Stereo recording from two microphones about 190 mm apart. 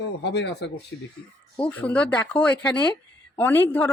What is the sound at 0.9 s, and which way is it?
Speech, 75° left (ahead or behind).